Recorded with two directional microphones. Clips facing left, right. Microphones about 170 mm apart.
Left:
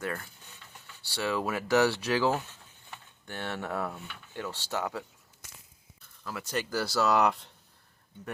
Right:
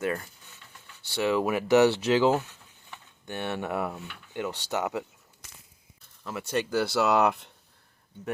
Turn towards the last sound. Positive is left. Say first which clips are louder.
# right 3 dB
turn(degrees=-25)  # may be behind; listen again after turning